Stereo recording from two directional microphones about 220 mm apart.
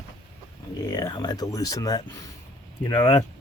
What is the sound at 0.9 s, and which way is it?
Speech, 20° left (ahead or behind).